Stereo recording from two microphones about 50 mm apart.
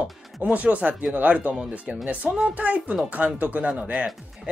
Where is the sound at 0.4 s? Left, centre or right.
Right.